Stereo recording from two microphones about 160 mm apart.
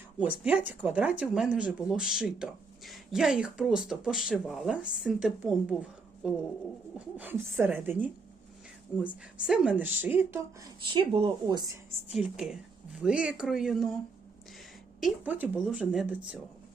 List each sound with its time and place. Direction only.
0.2 s speech: 10° right (ahead or behind)
10.6 s speech: 30° right (ahead or behind)
12.1 s speech: 5° right (ahead or behind)
15.0 s speech: 10° right (ahead or behind)